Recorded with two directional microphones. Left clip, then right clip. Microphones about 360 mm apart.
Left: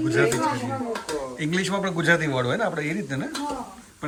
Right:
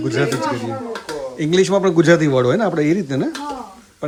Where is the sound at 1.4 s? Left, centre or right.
Centre.